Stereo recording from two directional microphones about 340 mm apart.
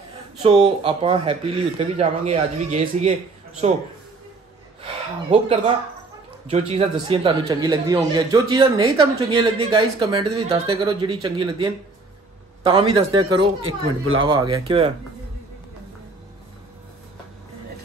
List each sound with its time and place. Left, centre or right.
0.4 s speech: centre
4.8 s speech: centre